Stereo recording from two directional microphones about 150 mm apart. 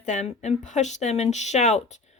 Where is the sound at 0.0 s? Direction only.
50° left (ahead or behind).